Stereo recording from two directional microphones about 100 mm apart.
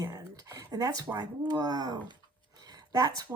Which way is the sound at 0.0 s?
35° right (ahead or behind).